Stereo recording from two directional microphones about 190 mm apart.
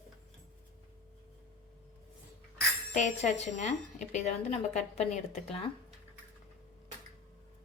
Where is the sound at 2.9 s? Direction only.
35° left (ahead or behind).